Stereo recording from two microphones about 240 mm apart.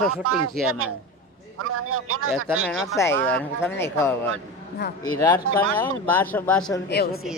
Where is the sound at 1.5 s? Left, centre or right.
Right.